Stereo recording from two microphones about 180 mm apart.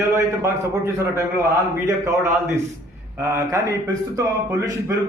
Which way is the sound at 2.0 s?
15° right (ahead or behind).